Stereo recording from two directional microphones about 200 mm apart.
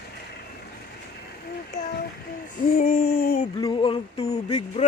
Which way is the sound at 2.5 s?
45° left (ahead or behind).